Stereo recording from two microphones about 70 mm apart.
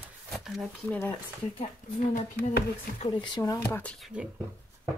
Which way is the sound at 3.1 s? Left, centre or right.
Left.